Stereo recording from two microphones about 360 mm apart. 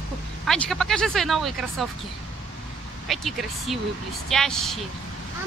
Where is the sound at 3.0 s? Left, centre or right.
Centre.